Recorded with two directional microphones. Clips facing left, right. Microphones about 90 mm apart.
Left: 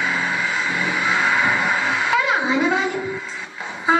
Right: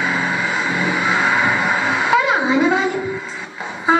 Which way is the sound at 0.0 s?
25° right (ahead or behind).